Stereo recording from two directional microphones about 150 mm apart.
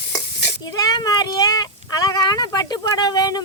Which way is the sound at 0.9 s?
25° left (ahead or behind).